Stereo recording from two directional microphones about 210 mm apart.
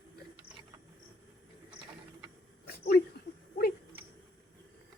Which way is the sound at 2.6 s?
45° left (ahead or behind).